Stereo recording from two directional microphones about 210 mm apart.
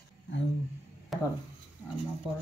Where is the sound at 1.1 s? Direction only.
Centre (ahead or behind).